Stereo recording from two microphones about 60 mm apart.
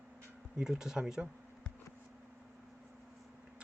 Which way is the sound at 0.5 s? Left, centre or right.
Centre.